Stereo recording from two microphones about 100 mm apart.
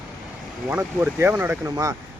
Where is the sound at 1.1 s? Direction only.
20° right (ahead or behind).